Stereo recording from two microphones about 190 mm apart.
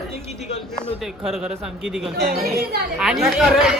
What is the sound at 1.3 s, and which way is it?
Speech, centre (ahead or behind).